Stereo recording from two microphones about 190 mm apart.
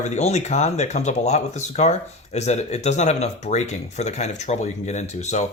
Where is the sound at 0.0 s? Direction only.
35° left (ahead or behind).